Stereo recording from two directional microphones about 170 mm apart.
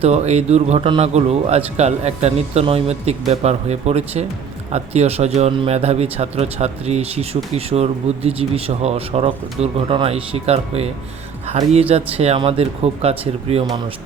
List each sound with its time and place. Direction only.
0.0 s speech: 40° right (ahead or behind)